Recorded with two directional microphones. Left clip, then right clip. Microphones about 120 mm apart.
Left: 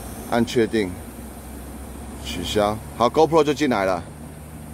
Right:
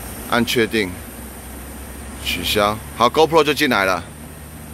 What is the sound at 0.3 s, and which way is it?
Speech, 20° left (ahead or behind).